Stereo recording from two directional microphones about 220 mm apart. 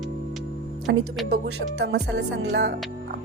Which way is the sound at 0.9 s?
55° right (ahead or behind).